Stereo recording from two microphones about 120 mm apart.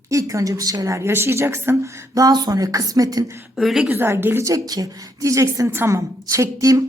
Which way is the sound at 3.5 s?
5° right (ahead or behind).